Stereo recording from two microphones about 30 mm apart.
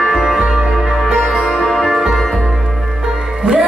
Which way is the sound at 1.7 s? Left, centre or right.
Centre.